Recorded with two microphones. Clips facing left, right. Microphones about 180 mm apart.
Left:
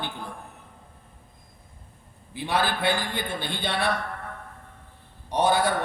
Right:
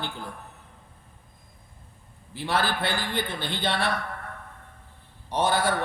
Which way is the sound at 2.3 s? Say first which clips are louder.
Left 1 dB; 15° left (ahead or behind).